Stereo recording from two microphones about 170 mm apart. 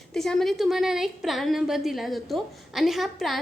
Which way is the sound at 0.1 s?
Centre (ahead or behind).